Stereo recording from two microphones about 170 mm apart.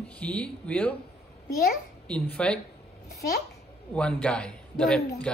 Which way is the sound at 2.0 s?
5° left (ahead or behind).